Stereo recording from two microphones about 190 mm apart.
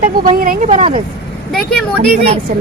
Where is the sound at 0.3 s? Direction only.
45° right (ahead or behind).